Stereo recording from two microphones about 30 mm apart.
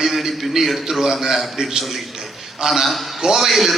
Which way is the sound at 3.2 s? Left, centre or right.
Centre.